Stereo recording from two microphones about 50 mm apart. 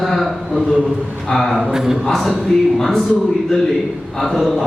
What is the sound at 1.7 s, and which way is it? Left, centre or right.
Speech, centre.